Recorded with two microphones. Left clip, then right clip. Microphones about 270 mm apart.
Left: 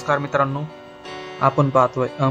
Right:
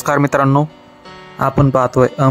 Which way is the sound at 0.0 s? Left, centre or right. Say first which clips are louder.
Right 6 dB; right.